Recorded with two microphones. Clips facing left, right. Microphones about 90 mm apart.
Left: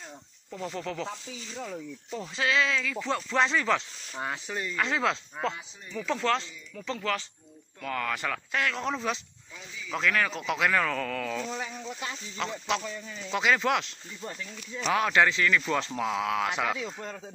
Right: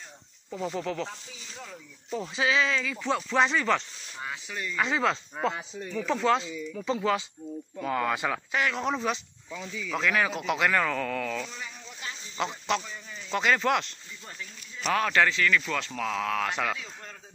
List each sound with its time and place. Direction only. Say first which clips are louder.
0.5 s speech: right 3 dB; 5° right (ahead or behind)
2.0 s speech: right 2 dB; 5° right (ahead or behind)
4.2 s speech: left 3 dB; 35° left (ahead or behind)
4.7 s speech: right 2 dB; 5° right (ahead or behind)
8.5 s speech: right 1 dB; 5° right (ahead or behind)